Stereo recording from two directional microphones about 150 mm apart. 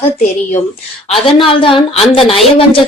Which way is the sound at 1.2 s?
35° left (ahead or behind).